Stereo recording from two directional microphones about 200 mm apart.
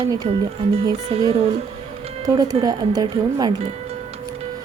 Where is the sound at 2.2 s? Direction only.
20° right (ahead or behind).